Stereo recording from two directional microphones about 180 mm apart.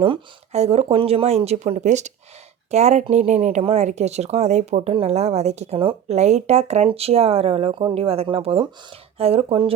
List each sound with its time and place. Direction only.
0.0 s speech: 35° right (ahead or behind)